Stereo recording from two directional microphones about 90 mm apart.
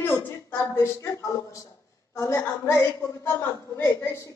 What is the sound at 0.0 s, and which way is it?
A woman's voice, 25° left (ahead or behind).